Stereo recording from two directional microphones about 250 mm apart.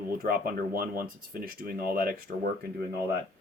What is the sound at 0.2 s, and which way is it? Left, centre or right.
Speech, right.